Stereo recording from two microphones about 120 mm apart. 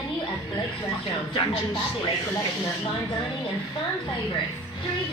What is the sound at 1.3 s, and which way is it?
Speech, 45° left (ahead or behind).